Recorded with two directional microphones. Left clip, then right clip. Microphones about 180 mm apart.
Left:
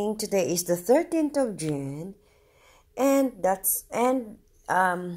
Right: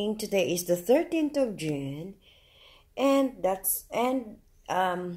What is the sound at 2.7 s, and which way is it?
Speech, 30° left (ahead or behind).